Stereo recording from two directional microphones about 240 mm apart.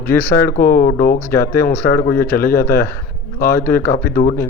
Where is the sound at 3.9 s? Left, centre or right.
Left.